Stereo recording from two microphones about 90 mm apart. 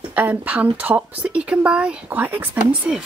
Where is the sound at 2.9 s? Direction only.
10° right (ahead or behind).